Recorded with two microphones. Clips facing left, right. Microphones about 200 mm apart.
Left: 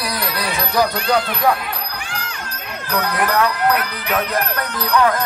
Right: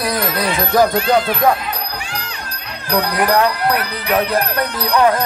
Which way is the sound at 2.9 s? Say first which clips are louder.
Right 4 dB; 35° right (ahead or behind).